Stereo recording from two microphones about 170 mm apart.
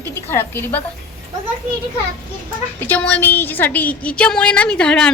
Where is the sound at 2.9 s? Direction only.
10° left (ahead or behind).